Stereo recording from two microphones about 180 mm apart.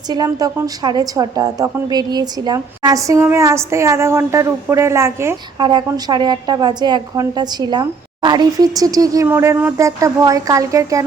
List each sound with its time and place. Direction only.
0.1 s a woman's voice: 20° right (ahead or behind)